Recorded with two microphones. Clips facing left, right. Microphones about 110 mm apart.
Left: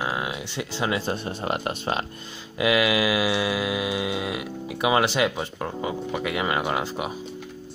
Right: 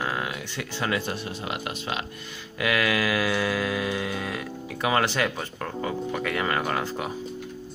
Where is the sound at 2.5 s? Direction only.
20° left (ahead or behind).